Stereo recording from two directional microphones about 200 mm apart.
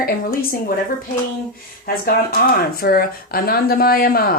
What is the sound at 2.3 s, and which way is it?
Speech, 50° left (ahead or behind).